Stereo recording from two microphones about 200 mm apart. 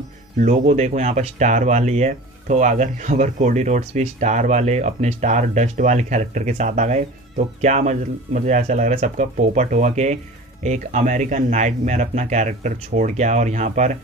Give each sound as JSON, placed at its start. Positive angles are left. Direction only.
{"t": 0.4, "sound": "speech", "side_deg": -35}